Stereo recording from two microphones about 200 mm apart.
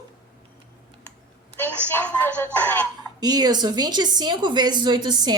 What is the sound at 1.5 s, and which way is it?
A woman's voice, 10° left (ahead or behind).